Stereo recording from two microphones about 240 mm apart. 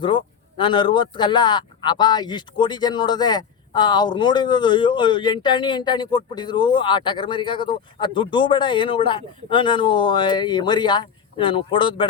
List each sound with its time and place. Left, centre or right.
0.0 s speech: centre